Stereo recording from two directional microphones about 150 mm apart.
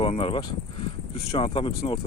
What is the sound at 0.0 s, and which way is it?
Speech, 40° left (ahead or behind).